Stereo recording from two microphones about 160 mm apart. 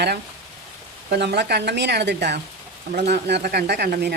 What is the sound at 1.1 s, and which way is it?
Speech, 90° right.